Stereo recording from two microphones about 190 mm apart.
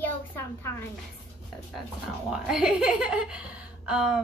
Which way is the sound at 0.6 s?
10° left (ahead or behind).